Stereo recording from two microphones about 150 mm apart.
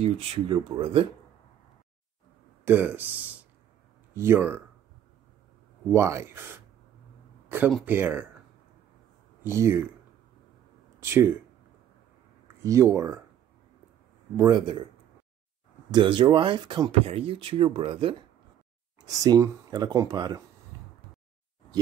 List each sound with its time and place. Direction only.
0.0 s speech: 40° right (ahead or behind)
2.6 s speech: 15° right (ahead or behind)
5.9 s speech: 20° right (ahead or behind)
7.4 s a sound: 15° right (ahead or behind)
7.8 s speech: 15° right (ahead or behind)
9.4 s speech: 15° right (ahead or behind)
11.0 s speech: 15° right (ahead or behind)
12.9 s speech: 20° right (ahead or behind)
14.3 s speech: 20° right (ahead or behind)
15.9 s speech: 30° right (ahead or behind)
17.0 s speech: 40° right (ahead or behind)
19.0 s speech: 25° right (ahead or behind)
20.7 s a sound: 20° right (ahead or behind)